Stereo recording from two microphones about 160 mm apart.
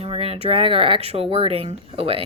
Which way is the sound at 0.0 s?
40° right (ahead or behind).